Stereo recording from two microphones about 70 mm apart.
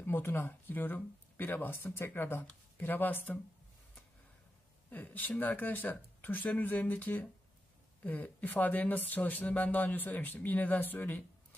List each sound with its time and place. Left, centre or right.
0.0 s speech: left
4.8 s speech: left